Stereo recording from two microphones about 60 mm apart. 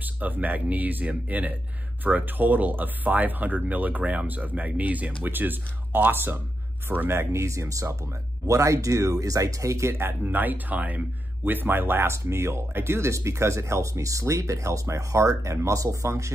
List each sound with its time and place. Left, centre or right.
0.0 s speech: right